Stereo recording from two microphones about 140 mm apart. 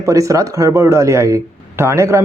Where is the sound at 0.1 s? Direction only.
25° right (ahead or behind).